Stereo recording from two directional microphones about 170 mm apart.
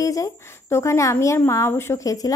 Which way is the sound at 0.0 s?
20° left (ahead or behind).